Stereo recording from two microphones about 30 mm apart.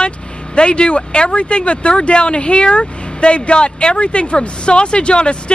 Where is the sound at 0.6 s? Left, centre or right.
Left.